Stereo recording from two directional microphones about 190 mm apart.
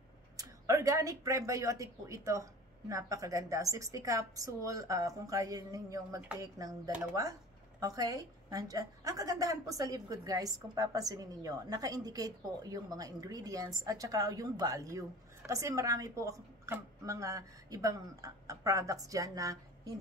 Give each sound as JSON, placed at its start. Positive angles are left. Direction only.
{"t": 0.4, "sound": "a woman's voice", "side_deg": -15}
{"t": 7.8, "sound": "a woman's voice", "side_deg": -20}